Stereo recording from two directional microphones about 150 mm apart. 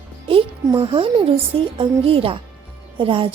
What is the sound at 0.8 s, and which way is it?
A woman's voice, 35° right (ahead or behind).